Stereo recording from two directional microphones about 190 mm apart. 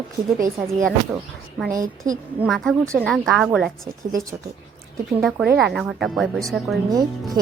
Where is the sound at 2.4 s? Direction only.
Centre (ahead or behind).